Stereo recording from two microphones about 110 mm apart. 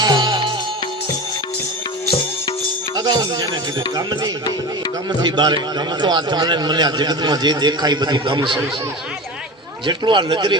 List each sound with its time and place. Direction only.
0.0 s music: 40° right (ahead or behind)
2.9 s music: 40° right (ahead or behind)
3.9 s a man's voice: 40° right (ahead or behind)
9.8 s speech: 45° right (ahead or behind)